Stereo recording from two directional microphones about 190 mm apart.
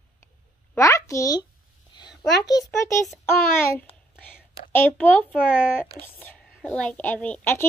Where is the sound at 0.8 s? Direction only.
15° left (ahead or behind).